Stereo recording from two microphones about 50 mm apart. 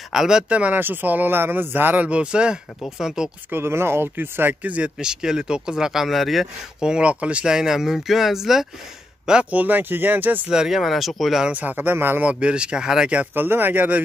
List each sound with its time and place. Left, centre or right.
0.1 s speech: centre
0.5 s speech: right
0.7 s speech: right
2.0 s speech: right
3.5 s speech: right
5.0 s speech: centre
6.8 s speech: centre
7.4 s speech: centre
9.5 s speech: right
10.5 s speech: centre
10.8 s speech: centre
11.5 s speech: right
12.2 s speech: right
13.3 s speech: right